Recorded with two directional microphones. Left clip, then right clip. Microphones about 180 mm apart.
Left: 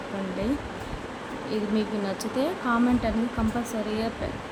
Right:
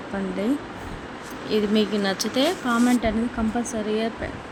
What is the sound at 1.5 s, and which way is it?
Speech, 10° right (ahead or behind).